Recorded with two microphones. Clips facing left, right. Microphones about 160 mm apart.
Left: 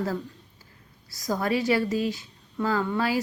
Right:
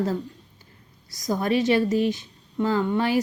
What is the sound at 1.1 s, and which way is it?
A woman's voice, 20° right (ahead or behind).